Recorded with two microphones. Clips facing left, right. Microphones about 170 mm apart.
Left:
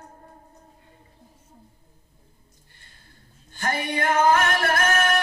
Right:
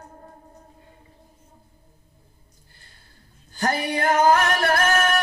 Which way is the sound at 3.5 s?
35° right (ahead or behind).